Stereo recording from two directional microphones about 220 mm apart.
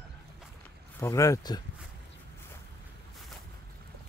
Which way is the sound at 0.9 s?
15° left (ahead or behind).